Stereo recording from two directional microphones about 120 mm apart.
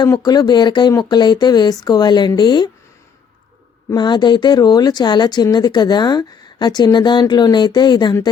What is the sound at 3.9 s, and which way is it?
Speech, 35° left (ahead or behind).